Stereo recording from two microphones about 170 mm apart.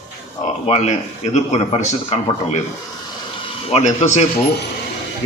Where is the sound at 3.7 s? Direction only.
40° left (ahead or behind).